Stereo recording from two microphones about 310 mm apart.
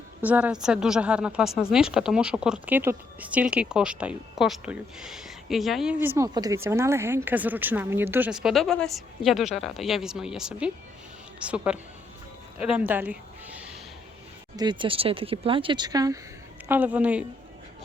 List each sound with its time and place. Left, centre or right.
0.2 s speech: centre
12.5 s a sound: centre
14.5 s speech: centre